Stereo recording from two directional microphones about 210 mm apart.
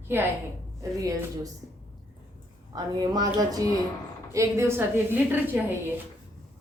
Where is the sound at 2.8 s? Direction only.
20° right (ahead or behind).